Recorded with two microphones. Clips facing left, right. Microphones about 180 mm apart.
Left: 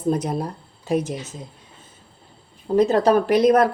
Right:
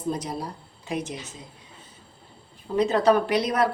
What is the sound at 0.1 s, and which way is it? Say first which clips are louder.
Speech: left 7 dB; 55° left (ahead or behind).